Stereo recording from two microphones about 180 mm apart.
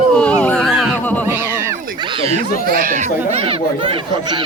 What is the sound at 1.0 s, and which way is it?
Music, 10° left (ahead or behind).